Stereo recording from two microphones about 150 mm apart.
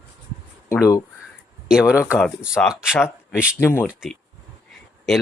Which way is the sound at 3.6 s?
15° left (ahead or behind).